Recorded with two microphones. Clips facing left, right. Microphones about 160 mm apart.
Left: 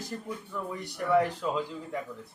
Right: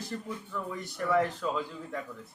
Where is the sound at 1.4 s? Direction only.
15° left (ahead or behind).